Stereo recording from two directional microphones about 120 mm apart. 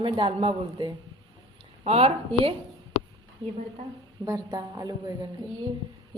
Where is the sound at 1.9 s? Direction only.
55° right (ahead or behind).